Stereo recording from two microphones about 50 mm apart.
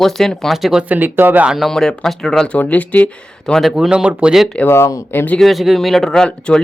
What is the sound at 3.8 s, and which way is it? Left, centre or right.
Speech, centre.